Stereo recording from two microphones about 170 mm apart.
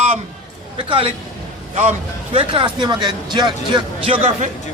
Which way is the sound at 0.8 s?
30° right (ahead or behind).